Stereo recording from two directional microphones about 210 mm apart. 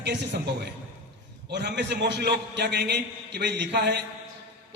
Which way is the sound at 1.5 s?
55° right (ahead or behind).